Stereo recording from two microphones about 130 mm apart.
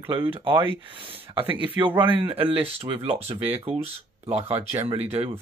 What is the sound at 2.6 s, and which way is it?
Speech, 50° right (ahead or behind).